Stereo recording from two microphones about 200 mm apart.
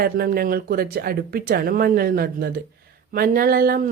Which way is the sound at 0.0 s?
50° right (ahead or behind).